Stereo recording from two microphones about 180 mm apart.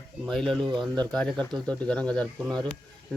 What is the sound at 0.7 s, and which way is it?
Speech, 25° right (ahead or behind).